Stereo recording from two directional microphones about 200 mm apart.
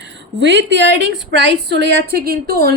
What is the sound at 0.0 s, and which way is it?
A woman's voice, 60° right (ahead or behind).